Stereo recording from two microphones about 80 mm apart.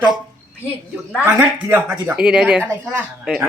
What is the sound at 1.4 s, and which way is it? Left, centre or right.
Speech, right.